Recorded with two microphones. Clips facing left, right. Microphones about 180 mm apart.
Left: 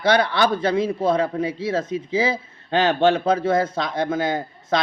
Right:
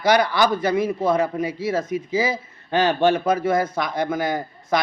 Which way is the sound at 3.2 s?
25° left (ahead or behind).